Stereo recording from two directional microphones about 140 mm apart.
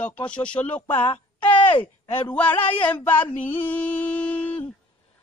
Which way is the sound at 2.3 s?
10° left (ahead or behind).